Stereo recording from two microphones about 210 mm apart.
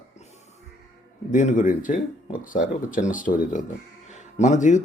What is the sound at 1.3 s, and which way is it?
Speech, 35° left (ahead or behind).